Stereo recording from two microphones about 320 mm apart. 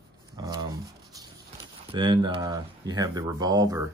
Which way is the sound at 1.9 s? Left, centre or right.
Centre.